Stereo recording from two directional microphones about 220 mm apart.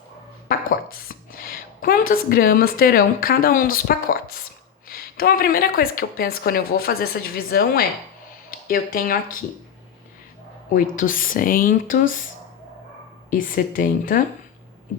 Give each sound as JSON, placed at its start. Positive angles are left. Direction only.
{"t": 0.4, "sound": "a woman's voice", "side_deg": 40}
{"t": 10.8, "sound": "speech", "side_deg": 40}
{"t": 13.3, "sound": "speech", "side_deg": 40}